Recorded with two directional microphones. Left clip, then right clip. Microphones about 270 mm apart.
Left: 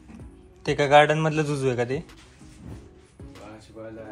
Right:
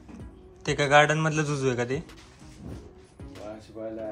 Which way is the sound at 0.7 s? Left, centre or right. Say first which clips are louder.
Left 3 dB; centre.